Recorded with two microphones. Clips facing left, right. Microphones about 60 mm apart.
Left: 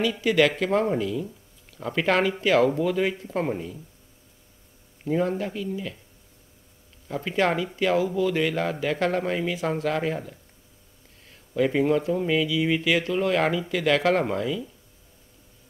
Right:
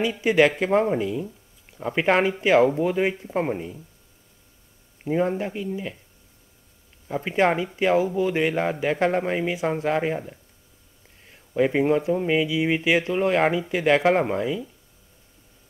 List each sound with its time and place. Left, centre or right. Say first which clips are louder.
0.0 s speech: right 2 dB; right
5.0 s a man's voice: right 1 dB; right
7.1 s speech: right 3 dB; right